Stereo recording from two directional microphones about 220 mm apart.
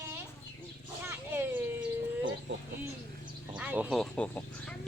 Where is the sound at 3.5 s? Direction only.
5° right (ahead or behind).